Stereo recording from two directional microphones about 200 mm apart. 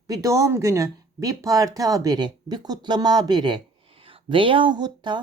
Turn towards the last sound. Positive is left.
turn(degrees=-20)  # may be behind; listen again after turning